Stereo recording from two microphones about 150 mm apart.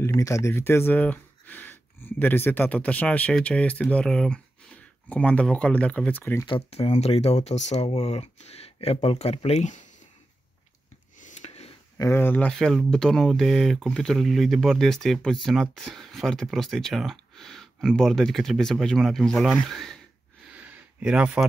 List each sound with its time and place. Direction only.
0.0 s speech: 20° left (ahead or behind)
6.4 s speech: 40° left (ahead or behind)
11.1 s snort: 55° left (ahead or behind)
12.0 s speech: 15° left (ahead or behind)
20.5 s a sound: 10° right (ahead or behind)